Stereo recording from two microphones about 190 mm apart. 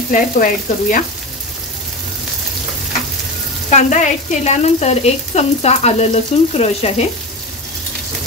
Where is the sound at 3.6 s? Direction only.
40° left (ahead or behind).